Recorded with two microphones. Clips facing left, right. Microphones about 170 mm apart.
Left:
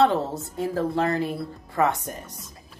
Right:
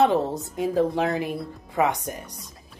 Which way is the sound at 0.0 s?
15° right (ahead or behind).